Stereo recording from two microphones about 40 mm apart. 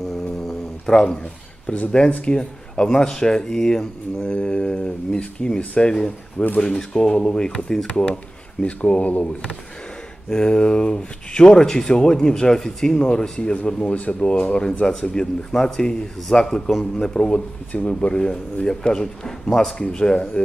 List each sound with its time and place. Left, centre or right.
0.4 s a sound: centre
1.9 s a man's voice: left
4.2 s speech: left
10.3 s speech: left